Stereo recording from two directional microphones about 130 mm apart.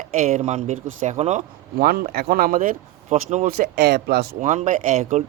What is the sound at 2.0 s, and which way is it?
Speech, 90° right.